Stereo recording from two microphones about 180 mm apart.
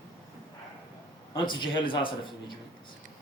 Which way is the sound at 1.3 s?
25° left (ahead or behind).